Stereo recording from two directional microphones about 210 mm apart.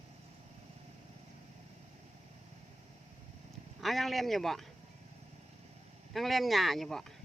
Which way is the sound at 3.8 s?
Centre (ahead or behind).